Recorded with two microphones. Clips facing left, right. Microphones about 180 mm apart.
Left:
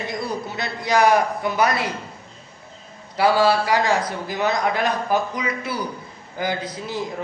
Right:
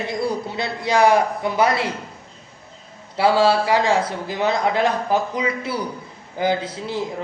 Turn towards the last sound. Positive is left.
turn(degrees=-25)  # may be behind; listen again after turning